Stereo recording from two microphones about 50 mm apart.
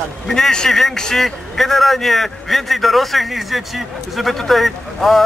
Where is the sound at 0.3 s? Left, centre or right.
Centre.